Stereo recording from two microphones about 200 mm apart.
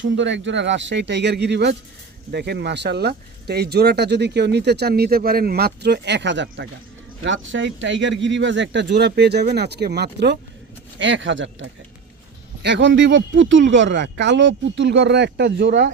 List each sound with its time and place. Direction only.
0.0 s speech: 65° right (ahead or behind)
11.0 s speech: 70° right (ahead or behind)
12.6 s speech: 60° right (ahead or behind)